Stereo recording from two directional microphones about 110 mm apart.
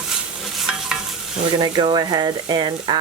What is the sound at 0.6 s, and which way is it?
Stir, 5° right (ahead or behind).